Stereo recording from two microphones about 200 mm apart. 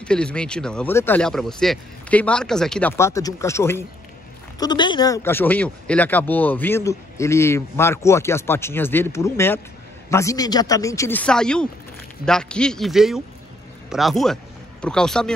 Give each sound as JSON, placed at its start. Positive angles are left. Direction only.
{"t": 0.0, "sound": "speech", "side_deg": 5}
{"t": 3.0, "sound": "speech", "side_deg": 15}